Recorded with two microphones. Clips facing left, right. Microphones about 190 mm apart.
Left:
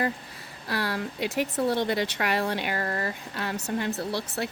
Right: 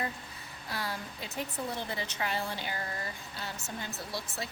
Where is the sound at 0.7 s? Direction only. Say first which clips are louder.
Left 8 dB; 85° left.